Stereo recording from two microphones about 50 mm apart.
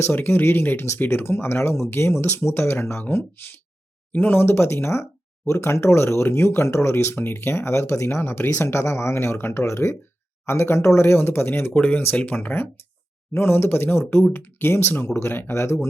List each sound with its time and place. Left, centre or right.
0.1 s speech: left
9.7 s speech: left
10.4 s speech: left
11.7 s speech: left